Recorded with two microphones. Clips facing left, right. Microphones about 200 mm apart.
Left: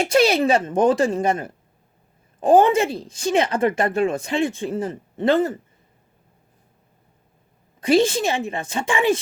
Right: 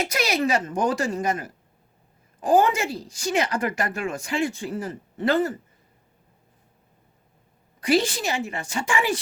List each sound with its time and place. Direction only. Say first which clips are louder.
0.0 s speech: left 7 dB; 30° left (ahead or behind)
7.8 s speech: left 5 dB; 25° left (ahead or behind)